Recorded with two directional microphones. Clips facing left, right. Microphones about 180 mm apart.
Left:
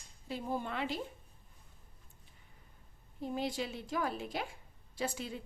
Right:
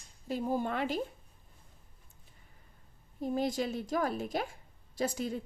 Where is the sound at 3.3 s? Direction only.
45° right (ahead or behind).